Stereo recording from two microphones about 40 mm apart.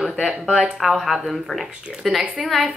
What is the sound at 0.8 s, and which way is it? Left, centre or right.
Speech, centre.